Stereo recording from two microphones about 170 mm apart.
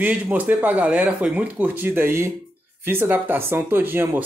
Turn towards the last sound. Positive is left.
turn(degrees=-10)  # may be behind; listen again after turning